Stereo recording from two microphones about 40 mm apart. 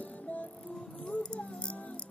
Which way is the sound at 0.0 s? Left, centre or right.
Left.